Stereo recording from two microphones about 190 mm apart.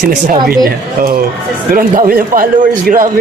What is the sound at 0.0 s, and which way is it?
Speech, 55° right (ahead or behind).